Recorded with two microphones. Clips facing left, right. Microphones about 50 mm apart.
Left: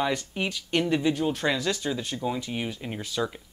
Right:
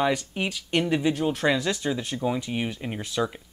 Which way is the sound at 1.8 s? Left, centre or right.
Centre.